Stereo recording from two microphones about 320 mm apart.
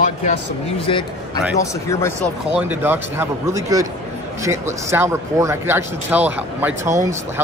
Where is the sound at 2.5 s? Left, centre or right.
Centre.